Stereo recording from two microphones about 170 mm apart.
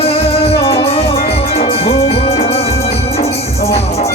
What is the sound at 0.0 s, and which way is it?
Music, 35° left (ahead or behind).